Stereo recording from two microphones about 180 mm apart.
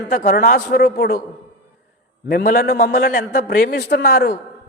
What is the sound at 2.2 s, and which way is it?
A man's voice, 55° left (ahead or behind).